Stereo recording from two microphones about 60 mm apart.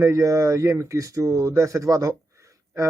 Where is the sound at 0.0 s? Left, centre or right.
Right.